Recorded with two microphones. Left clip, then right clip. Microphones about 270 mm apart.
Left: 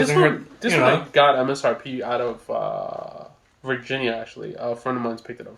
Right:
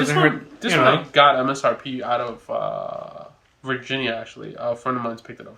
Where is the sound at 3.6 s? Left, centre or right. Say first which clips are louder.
Even; centre.